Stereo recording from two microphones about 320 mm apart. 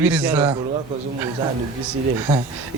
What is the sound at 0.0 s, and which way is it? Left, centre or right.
Speech, centre.